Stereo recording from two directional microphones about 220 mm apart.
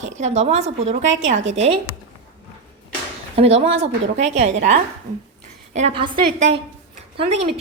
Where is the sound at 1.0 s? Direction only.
60° right (ahead or behind).